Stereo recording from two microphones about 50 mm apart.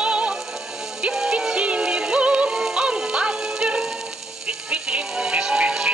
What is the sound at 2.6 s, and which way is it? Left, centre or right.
Music, centre.